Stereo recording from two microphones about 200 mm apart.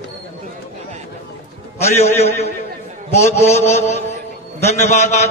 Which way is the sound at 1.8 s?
30° left (ahead or behind).